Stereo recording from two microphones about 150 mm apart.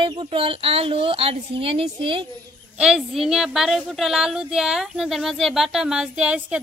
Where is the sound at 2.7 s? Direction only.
5° right (ahead or behind).